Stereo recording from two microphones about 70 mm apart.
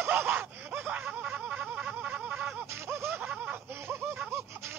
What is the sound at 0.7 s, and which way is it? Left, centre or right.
Snicker, right.